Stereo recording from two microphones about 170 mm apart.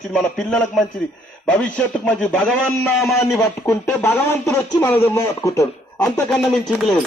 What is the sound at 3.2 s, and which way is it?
Speech, 15° left (ahead or behind).